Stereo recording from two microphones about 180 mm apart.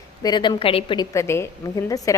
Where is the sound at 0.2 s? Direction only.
25° left (ahead or behind).